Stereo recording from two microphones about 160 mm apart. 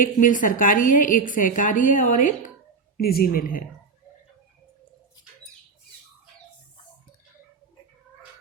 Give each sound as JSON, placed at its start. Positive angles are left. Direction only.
{"t": 0.0, "sound": "a woman's voice", "side_deg": 55}
{"t": 3.0, "sound": "speech", "side_deg": 70}